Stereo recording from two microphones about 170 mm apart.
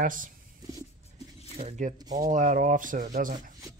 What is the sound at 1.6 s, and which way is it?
Speech, 45° right (ahead or behind).